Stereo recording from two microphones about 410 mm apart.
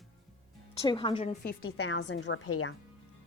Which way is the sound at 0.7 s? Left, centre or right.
Centre.